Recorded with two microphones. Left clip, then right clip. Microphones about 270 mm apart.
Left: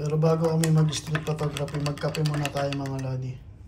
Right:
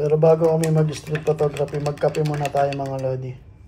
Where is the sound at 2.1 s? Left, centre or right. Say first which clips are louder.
Right 7 dB; centre.